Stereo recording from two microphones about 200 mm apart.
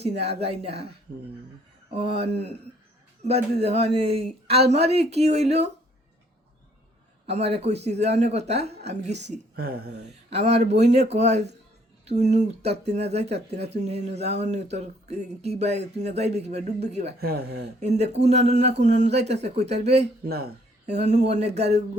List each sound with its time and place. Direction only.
0.0 s speech: 30° right (ahead or behind)
1.1 s speech: 55° right (ahead or behind)
1.9 s speech: 30° right (ahead or behind)
7.3 s speech: 30° right (ahead or behind)
9.6 s speech: 50° right (ahead or behind)
10.2 s speech: 30° right (ahead or behind)
17.2 s speech: 50° right (ahead or behind)
17.7 s speech: 35° right (ahead or behind)
20.2 s speech: 50° right (ahead or behind)
20.8 s speech: 35° right (ahead or behind)